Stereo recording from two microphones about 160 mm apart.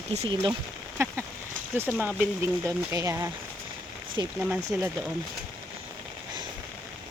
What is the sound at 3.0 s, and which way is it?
Speech, 20° right (ahead or behind).